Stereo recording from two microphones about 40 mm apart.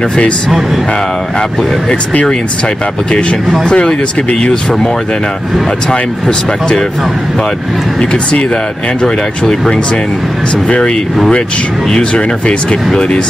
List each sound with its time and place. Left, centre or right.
3.1 s speech: left
8.0 s speech: left
10.5 s speech: left